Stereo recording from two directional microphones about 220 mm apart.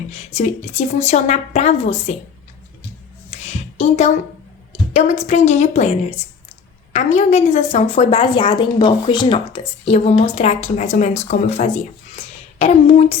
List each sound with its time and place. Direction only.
0.1 s a woman's voice: 30° left (ahead or behind)
3.8 s a woman's voice: 30° left (ahead or behind)